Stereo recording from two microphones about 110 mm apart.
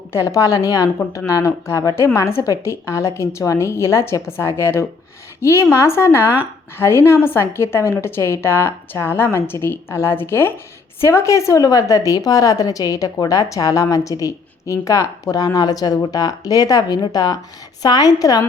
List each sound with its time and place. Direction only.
0.1 s a woman's voice: 30° left (ahead or behind)